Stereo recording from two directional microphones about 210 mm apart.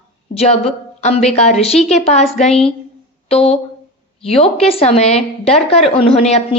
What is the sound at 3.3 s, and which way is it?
A woman's voice, 30° left (ahead or behind).